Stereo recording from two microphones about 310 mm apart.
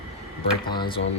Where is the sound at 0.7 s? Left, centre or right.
Centre.